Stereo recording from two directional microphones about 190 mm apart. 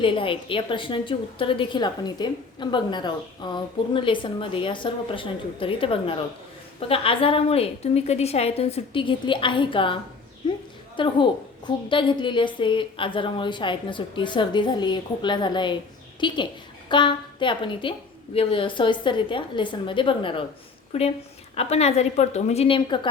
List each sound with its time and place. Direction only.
0.0 s a woman's voice: 25° left (ahead or behind)